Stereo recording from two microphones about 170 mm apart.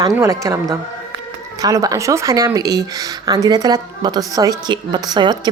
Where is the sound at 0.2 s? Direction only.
15° right (ahead or behind).